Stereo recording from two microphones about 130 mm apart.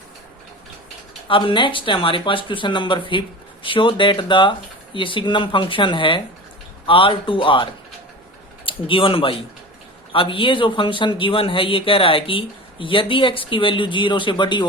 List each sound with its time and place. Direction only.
1.3 s a man's voice: 40° left (ahead or behind)